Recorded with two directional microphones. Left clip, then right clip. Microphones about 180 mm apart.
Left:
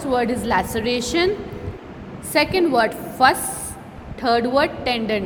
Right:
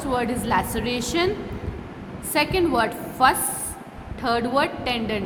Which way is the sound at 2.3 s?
15° left (ahead or behind).